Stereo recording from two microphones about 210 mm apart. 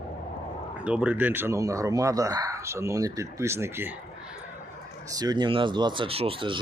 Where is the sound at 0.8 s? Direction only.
5° right (ahead or behind).